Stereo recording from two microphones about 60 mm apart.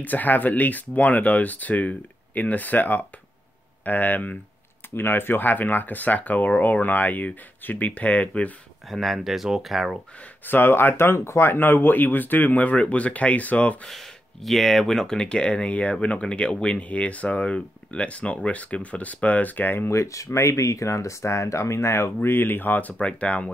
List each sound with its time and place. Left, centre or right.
0.0 s speech: left
8.8 s speech: centre
10.2 s speech: left
13.8 s speech: centre; by 19.9 s left
19.9 s speech: left